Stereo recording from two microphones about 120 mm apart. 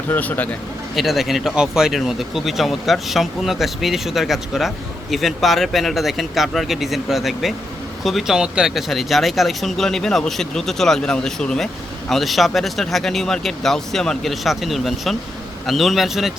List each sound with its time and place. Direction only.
0.1 s speech: 15° left (ahead or behind)
0.9 s speech: centre (ahead or behind)